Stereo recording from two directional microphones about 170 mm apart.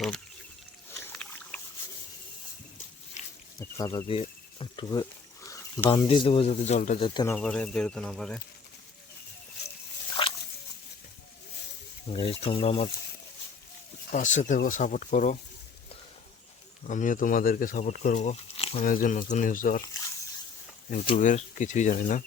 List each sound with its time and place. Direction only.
0.9 s a sound: 10° left (ahead or behind)
3.6 s speech: 15° left (ahead or behind)
4.1 s speech: 30° left (ahead or behind)
5.5 s a sound: 20° left (ahead or behind)
6.1 s speech: 30° left (ahead or behind)
7.0 s speech: 25° left (ahead or behind)
7.3 s speech: 5° left (ahead or behind)
10.2 s a sound: 30° left (ahead or behind)
12.1 s speech: 30° left (ahead or behind)
14.1 s speech: 45° left (ahead or behind)
16.8 s speech: 50° left (ahead or behind)
18.9 s speech: 50° left (ahead or behind)
21.2 s speech: 45° left (ahead or behind)